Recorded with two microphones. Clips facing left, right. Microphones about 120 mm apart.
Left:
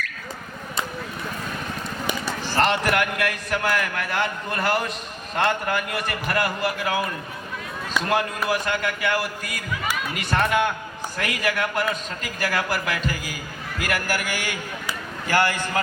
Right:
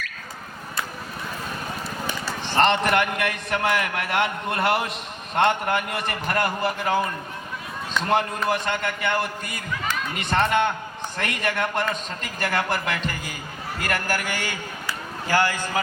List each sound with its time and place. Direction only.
2.6 s a man's voice: 5° left (ahead or behind)
15.3 s a man's voice: 15° right (ahead or behind)